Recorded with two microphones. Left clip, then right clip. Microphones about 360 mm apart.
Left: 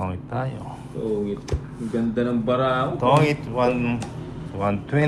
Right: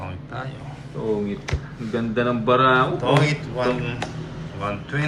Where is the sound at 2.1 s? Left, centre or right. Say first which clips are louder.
Right 5 dB; right.